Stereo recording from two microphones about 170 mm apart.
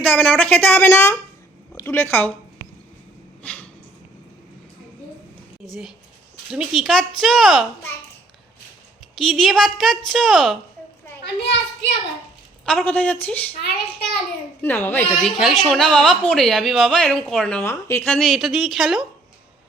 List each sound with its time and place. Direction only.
0.0 s a woman's voice: 10° left (ahead or behind)
3.4 s snort: 10° left (ahead or behind)
6.5 s speech: centre (ahead or behind)
9.1 s speech: centre (ahead or behind)
11.2 s a child's voice: 90° left
12.6 s a woman's voice: 10° left (ahead or behind)
14.6 s a woman's voice: 10° left (ahead or behind)
18.3 s speech: centre (ahead or behind)